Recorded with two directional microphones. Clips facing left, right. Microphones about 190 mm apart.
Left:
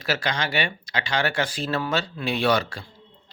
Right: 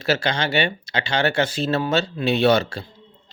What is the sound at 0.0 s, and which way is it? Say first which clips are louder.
Speech: right 4 dB; 25° right (ahead or behind).